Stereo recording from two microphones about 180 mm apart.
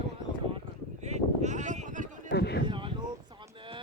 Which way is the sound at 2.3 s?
65° left (ahead or behind).